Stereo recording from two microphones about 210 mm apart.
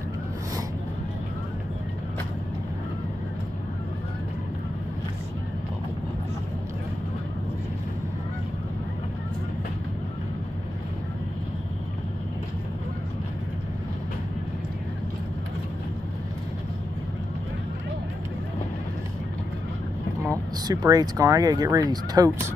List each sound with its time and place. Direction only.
20.2 s speech: 15° right (ahead or behind)